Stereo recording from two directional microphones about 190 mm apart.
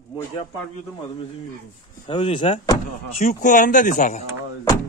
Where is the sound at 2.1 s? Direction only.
35° left (ahead or behind).